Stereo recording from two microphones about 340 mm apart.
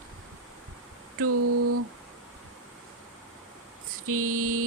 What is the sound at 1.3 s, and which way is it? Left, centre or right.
Speech, right.